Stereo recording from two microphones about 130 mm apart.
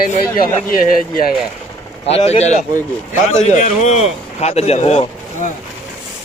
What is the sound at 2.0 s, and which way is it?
A man's voice, 50° left (ahead or behind).